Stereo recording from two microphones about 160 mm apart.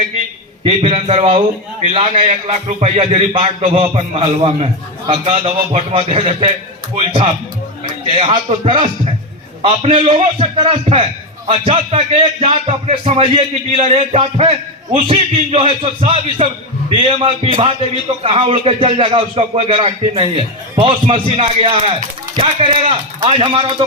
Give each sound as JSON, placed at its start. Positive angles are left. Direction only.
{"t": 0.6, "sound": "a man's voice", "side_deg": -35}